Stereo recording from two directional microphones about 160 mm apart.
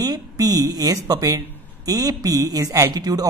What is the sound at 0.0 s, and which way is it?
Speech, 25° right (ahead or behind).